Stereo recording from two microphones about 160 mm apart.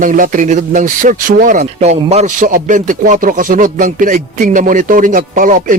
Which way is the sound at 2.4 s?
55° right (ahead or behind).